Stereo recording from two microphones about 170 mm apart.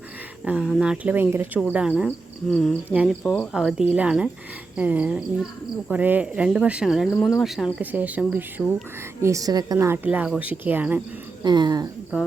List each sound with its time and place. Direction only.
0.4 s speech: 5° right (ahead or behind)
2.0 s speech: 5° left (ahead or behind)
11.4 s speech: 25° right (ahead or behind)